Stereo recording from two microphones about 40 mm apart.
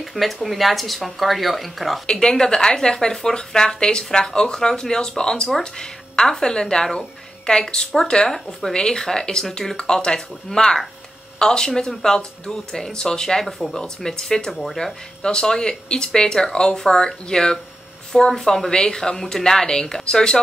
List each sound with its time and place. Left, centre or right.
0.0 s speech: centre
2.0 s a woman's voice: centre
14.6 s speech: centre
15.2 s speech: centre